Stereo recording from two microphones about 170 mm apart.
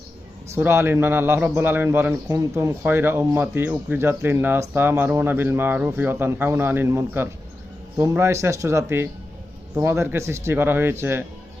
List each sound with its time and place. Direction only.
0.5 s a man's voice: 15° right (ahead or behind)